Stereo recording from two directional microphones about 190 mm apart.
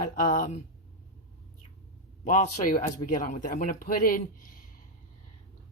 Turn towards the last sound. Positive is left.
turn(degrees=45)  # may be behind; listen again after turning